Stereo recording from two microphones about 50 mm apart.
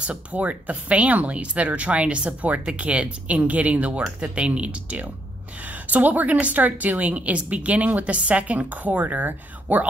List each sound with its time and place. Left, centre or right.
0.0 s a woman's voice: right